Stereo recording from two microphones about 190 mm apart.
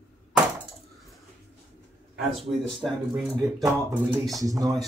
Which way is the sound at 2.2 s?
Centre (ahead or behind).